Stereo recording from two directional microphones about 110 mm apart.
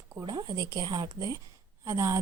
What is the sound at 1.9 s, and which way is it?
Speech, 30° right (ahead or behind).